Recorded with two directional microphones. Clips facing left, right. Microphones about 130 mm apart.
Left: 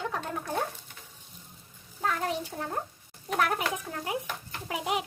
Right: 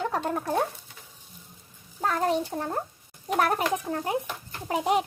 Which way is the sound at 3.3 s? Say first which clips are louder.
Right 3 dB; 40° right (ahead or behind).